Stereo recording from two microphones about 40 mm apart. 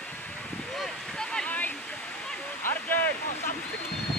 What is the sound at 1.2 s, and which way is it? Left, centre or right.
Waterfall, centre.